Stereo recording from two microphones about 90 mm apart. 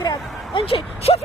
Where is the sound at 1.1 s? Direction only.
75° left (ahead or behind).